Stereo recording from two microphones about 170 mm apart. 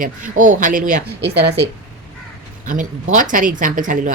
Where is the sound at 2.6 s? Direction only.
50° right (ahead or behind).